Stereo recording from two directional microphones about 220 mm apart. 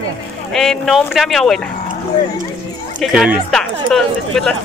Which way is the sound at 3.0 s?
5° right (ahead or behind).